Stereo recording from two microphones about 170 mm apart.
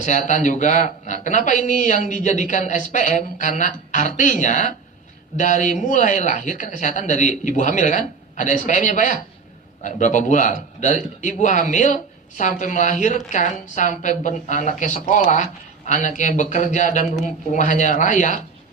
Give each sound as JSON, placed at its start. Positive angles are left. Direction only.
{"t": 0.0, "sound": "a man's voice", "side_deg": 45}